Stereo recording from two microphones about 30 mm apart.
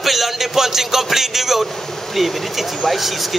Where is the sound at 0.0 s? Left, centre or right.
Centre.